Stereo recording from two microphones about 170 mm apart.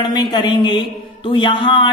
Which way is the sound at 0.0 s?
25° left (ahead or behind).